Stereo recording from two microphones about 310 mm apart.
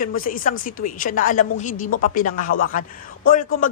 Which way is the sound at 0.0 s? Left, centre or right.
Left.